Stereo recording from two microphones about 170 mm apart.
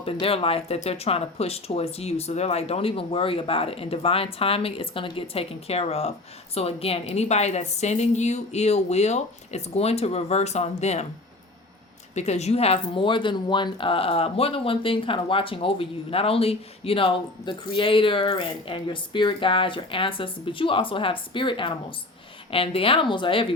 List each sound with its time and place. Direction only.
0.0 s speech: 35° left (ahead or behind)
12.1 s speech: 40° left (ahead or behind)